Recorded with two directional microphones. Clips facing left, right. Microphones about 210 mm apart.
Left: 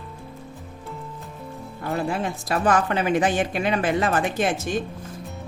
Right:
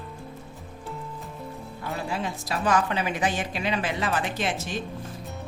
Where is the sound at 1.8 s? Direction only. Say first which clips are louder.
Left 5 dB; 50° left (ahead or behind).